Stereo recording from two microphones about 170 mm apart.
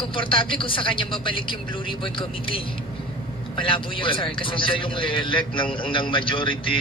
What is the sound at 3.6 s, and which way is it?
A man's voice, 30° left (ahead or behind).